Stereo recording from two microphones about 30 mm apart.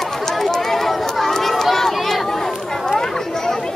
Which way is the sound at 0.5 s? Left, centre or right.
Centre.